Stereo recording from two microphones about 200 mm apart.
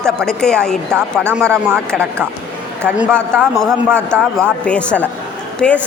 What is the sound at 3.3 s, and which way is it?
A woman's voice, 5° left (ahead or behind).